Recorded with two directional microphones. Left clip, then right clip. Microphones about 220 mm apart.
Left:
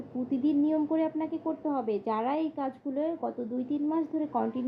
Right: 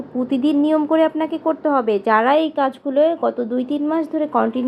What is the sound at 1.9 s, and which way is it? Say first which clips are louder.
A woman's voice: right 15 dB; 15° right (ahead or behind).